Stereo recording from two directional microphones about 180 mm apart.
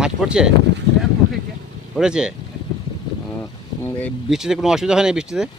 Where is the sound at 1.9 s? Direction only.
5° right (ahead or behind).